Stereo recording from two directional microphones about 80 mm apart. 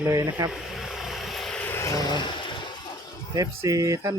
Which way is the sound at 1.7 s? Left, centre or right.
Left.